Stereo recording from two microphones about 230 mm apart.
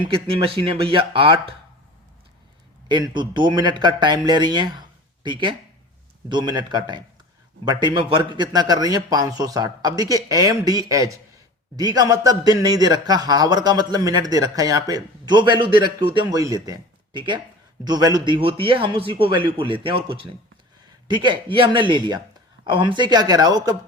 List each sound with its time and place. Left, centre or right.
0.0 s speech: right
2.9 s speech: centre